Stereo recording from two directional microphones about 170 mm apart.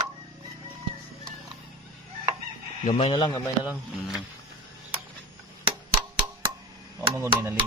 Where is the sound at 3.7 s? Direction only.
5° right (ahead or behind).